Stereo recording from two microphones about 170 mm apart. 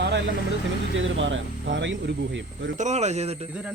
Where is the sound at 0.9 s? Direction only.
90° right.